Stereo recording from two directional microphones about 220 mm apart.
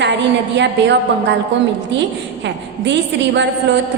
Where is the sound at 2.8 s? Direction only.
55° right (ahead or behind).